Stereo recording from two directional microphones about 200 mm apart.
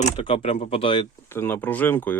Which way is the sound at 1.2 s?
10° left (ahead or behind).